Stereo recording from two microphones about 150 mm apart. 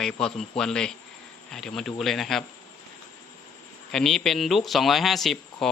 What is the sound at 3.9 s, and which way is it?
Speech, 5° left (ahead or behind).